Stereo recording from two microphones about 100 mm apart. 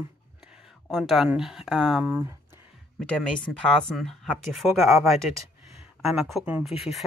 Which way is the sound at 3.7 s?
5° left (ahead or behind).